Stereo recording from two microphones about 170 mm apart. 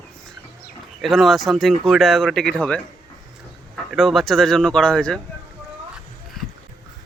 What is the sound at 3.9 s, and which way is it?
Speech, centre (ahead or behind).